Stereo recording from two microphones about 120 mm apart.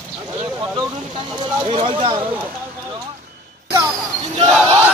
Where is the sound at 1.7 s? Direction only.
50° right (ahead or behind).